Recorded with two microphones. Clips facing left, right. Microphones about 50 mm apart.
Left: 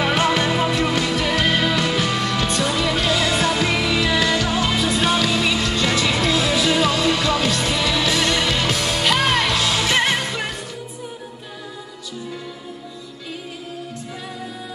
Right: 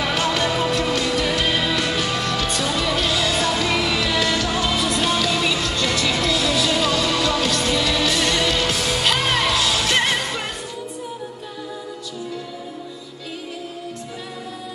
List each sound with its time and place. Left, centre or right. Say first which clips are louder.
0.0 s music: left 2 dB; left
1.1 s music: left 1 dB; centre
3.3 s music: left 1 dB; left
5.6 s music: left 2 dB; left
8.7 s music: left 1 dB; centre
9.8 s music: left 1 dB; centre